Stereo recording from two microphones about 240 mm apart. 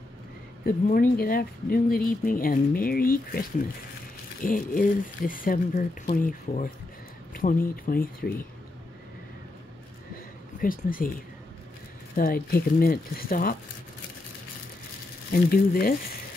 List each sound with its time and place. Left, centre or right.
0.7 s speech: left
10.6 s speech: left
12.2 s speech: left
15.3 s speech: left